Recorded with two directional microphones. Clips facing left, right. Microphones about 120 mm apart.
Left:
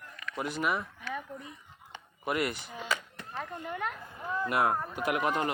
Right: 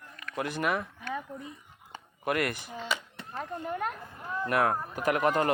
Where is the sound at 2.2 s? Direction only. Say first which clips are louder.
Right 2 dB; 55° right (ahead or behind).